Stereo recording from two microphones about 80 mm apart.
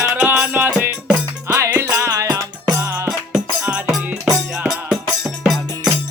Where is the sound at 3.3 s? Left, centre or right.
Centre.